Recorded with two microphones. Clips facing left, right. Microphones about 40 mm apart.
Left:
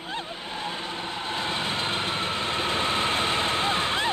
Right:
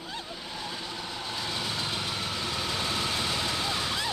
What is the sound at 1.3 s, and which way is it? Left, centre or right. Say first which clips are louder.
Vehicle: left 5 dB; left.